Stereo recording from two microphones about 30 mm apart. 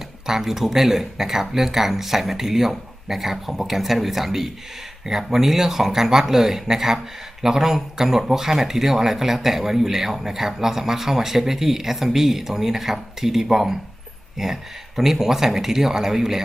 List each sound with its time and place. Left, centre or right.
0.3 s speech: centre